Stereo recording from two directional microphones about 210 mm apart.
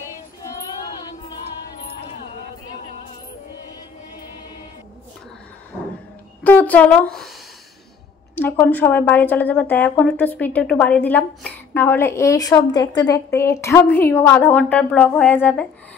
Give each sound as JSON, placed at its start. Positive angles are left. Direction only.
{"t": 0.4, "sound": "child singing", "side_deg": 15}
{"t": 6.4, "sound": "a woman's voice", "side_deg": 5}
{"t": 8.4, "sound": "a woman's voice", "side_deg": 10}